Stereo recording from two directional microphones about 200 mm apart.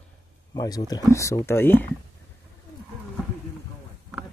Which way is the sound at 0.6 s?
20° left (ahead or behind).